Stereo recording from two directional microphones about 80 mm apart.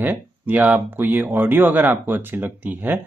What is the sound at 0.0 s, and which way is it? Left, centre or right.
Speech, right.